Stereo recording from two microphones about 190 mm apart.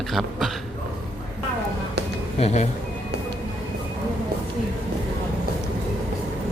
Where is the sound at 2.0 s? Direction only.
65° right (ahead or behind).